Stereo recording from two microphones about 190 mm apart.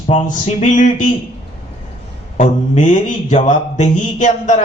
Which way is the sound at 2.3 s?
40° left (ahead or behind).